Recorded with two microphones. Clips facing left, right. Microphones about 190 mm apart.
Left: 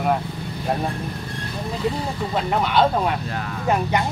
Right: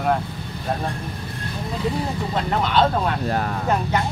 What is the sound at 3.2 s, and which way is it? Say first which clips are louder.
Speech: right 6 dB; 45° right (ahead or behind).